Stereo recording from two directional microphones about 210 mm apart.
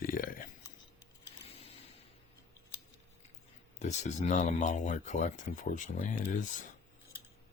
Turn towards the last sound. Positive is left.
turn(degrees=35)  # may be behind; listen again after turning